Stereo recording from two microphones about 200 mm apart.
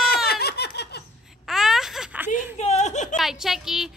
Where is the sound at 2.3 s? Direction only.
35° left (ahead or behind).